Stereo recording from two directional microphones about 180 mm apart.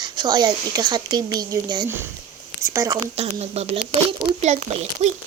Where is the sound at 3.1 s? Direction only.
35° right (ahead or behind).